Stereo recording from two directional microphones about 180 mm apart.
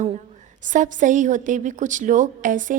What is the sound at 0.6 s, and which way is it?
A woman's voice, 45° right (ahead or behind).